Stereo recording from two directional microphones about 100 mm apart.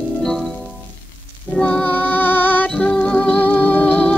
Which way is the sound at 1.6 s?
15° left (ahead or behind).